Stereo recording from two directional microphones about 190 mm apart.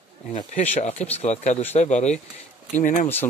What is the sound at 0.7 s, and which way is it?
Speech, 35° left (ahead or behind).